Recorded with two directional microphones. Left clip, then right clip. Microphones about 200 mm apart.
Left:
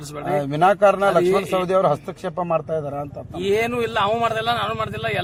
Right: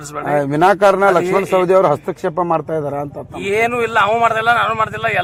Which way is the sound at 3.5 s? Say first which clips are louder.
Right 6 dB; 10° left (ahead or behind).